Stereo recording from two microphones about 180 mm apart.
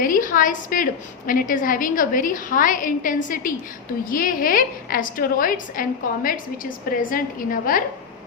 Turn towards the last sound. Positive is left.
turn(degrees=50)  # may be behind; listen again after turning